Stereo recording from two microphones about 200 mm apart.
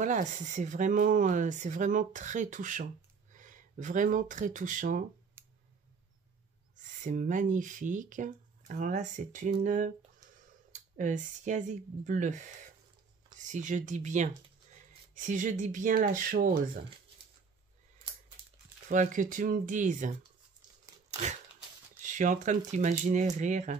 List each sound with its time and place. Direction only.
0.0 s speech: 35° right (ahead or behind)
7.0 s speech: 40° right (ahead or behind)
13.5 s speech: 40° right (ahead or behind)
18.9 s speech: 40° right (ahead or behind)
21.1 s a sound: 35° right (ahead or behind)
22.0 s speech: 40° right (ahead or behind)